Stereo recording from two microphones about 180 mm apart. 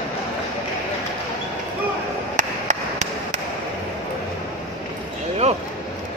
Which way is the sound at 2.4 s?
40° right (ahead or behind).